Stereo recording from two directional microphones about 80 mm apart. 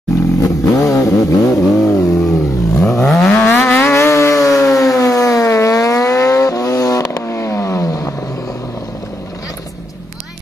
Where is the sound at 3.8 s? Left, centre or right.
Left.